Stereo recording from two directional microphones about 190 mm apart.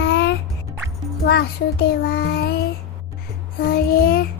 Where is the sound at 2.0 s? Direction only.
55° left (ahead or behind).